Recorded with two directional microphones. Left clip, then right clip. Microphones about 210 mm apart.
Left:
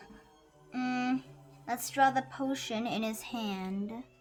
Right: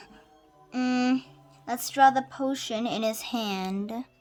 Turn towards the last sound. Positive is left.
turn(degrees=-45)  # may be behind; listen again after turning